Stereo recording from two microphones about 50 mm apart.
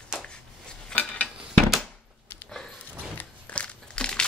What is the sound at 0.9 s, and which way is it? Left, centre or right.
Dishes, left.